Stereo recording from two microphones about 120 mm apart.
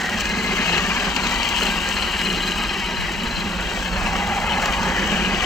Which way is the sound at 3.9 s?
Centre (ahead or behind).